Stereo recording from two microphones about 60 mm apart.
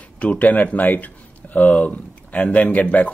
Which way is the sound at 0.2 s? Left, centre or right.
Left.